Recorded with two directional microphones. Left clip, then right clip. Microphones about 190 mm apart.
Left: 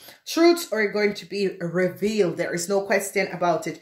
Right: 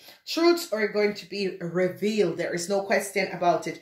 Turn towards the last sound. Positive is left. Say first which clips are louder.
# left 1 dB
turn(degrees=30)  # may be behind; listen again after turning